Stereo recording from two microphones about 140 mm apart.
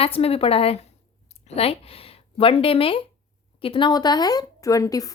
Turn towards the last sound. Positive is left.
turn(degrees=25)  # may be behind; listen again after turning